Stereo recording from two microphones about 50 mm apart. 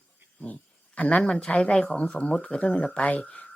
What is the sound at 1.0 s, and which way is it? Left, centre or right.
Speech, left.